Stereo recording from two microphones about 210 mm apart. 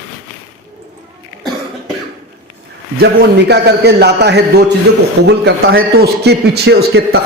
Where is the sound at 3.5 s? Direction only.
50° right (ahead or behind).